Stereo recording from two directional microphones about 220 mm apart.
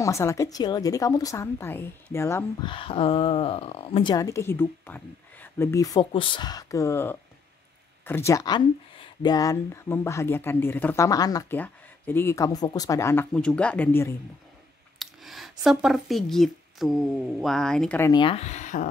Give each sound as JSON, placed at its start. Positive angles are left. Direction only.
{"t": 0.0, "sound": "speech", "side_deg": 15}
{"t": 2.7, "sound": "speech", "side_deg": 25}
{"t": 18.1, "sound": "speech", "side_deg": 25}